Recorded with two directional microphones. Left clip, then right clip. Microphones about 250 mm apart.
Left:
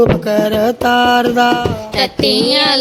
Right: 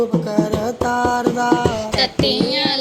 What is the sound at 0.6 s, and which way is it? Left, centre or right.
Music, left.